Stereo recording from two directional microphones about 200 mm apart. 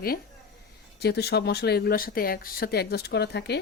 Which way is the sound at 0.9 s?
55° left (ahead or behind).